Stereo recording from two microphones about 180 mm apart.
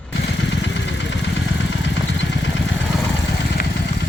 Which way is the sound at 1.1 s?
90° left.